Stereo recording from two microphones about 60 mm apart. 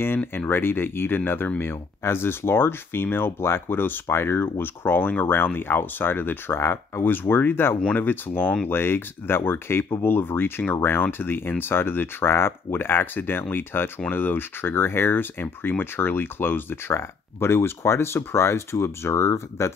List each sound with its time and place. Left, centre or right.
0.5 s speech: left